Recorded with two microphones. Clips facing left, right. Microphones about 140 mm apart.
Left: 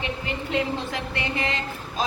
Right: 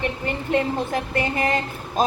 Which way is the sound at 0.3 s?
45° right (ahead or behind).